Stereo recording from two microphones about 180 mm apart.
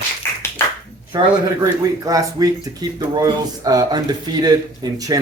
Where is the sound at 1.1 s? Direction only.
20° right (ahead or behind).